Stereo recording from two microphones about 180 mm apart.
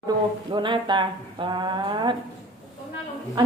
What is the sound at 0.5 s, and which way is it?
A woman's voice, 25° right (ahead or behind).